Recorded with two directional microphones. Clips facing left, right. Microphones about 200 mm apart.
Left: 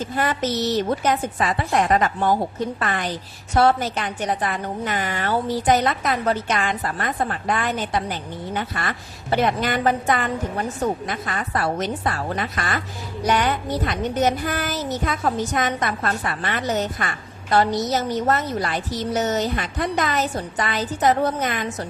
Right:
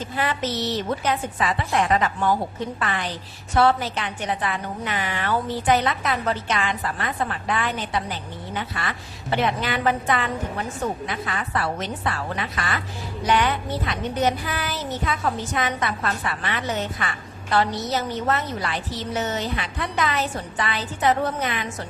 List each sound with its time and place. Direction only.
0.2 s a woman's voice: 45° left (ahead or behind)